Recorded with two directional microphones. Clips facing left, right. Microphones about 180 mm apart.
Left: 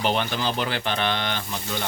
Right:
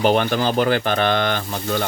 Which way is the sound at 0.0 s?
50° right (ahead or behind).